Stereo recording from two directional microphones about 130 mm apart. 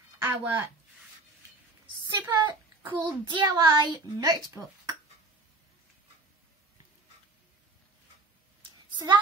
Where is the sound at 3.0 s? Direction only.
35° right (ahead or behind).